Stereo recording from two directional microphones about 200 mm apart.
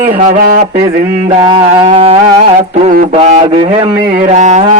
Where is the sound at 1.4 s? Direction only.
20° right (ahead or behind).